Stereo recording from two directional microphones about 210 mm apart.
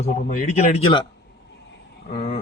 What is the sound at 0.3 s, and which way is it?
Speech, 30° left (ahead or behind).